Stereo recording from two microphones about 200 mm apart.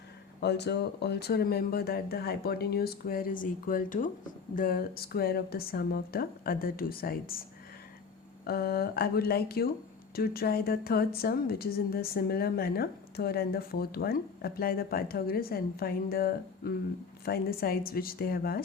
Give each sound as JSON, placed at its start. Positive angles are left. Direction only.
{"t": 0.3, "sound": "a woman's voice", "side_deg": 55}
{"t": 8.4, "sound": "a woman's voice", "side_deg": 50}